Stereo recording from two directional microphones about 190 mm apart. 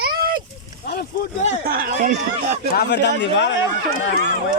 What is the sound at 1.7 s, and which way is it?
Speech, 45° right (ahead or behind).